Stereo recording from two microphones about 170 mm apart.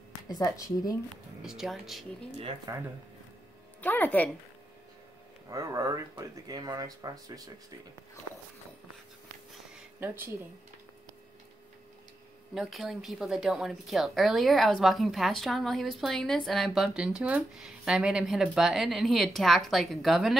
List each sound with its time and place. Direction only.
0.4 s speech: 20° left (ahead or behind)
1.4 s speech: 5° right (ahead or behind)
2.7 s speech: 20° right (ahead or behind)
3.8 s speech: 10° left (ahead or behind)
5.5 s speech: 20° right (ahead or behind)
9.9 s speech: 10° right (ahead or behind)
12.5 s speech: centre (ahead or behind)